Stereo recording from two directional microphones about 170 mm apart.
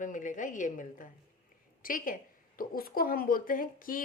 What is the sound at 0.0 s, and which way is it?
A woman's voice, 50° left (ahead or behind).